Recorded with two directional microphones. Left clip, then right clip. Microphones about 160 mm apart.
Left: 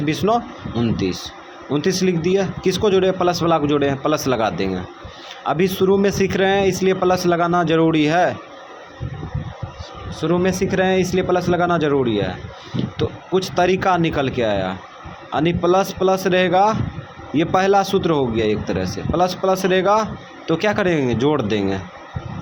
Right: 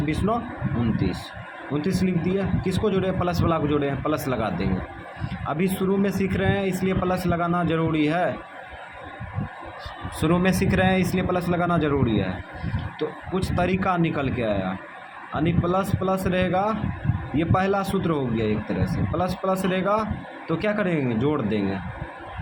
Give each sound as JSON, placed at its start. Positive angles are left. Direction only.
{"t": 0.0, "sound": "speech", "side_deg": 35}
{"t": 1.7, "sound": "speech", "side_deg": 35}
{"t": 10.2, "sound": "a man's voice", "side_deg": 15}